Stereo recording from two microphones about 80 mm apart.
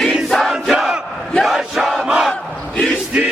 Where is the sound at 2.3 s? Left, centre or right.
Centre.